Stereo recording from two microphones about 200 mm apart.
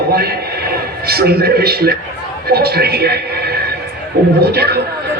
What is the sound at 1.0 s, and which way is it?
A man's voice, 50° right (ahead or behind).